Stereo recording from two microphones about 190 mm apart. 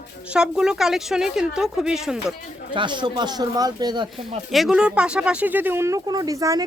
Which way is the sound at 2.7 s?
25° right (ahead or behind).